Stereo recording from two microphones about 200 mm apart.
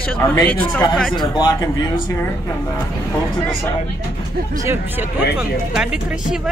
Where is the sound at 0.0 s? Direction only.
10° left (ahead or behind).